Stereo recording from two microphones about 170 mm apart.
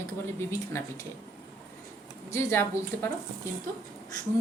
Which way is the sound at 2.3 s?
15° left (ahead or behind).